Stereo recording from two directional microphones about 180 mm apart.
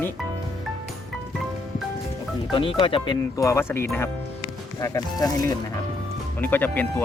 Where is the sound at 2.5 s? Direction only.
30° left (ahead or behind); by 7.0 s 10° left (ahead or behind).